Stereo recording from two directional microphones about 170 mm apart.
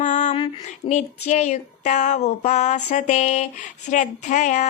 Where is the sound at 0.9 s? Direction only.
45° left (ahead or behind).